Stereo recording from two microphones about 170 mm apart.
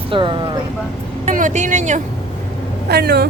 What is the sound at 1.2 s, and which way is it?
Speech, 45° right (ahead or behind).